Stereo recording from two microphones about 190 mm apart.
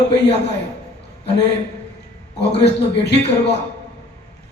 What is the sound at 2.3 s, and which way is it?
A man's voice, 65° left (ahead or behind).